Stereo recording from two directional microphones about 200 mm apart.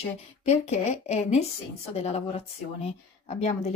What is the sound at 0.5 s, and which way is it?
Speech, 35° left (ahead or behind).